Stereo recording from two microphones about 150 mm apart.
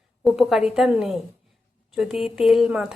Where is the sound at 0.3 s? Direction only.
Centre (ahead or behind).